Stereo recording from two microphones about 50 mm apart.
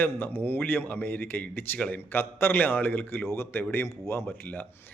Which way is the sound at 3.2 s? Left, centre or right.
Left.